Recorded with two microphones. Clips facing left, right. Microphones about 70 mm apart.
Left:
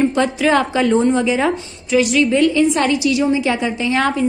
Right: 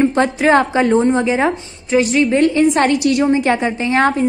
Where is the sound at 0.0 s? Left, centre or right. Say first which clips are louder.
Right 2 dB; right.